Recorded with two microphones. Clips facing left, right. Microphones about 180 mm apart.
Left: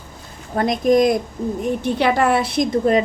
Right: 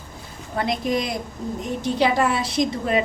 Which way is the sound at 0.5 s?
45° left (ahead or behind).